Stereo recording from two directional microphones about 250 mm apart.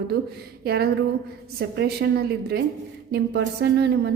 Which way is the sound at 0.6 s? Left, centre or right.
Right.